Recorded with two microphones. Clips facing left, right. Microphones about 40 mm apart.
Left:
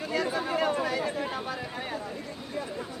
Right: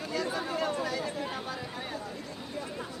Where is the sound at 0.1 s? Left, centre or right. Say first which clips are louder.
Left 4 dB; left.